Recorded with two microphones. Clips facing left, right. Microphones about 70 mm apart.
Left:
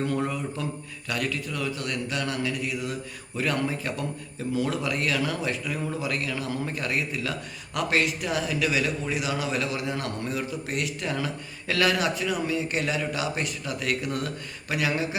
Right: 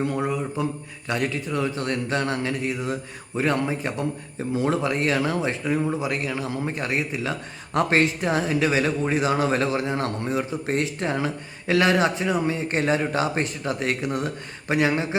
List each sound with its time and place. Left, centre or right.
0.0 s a man's voice: centre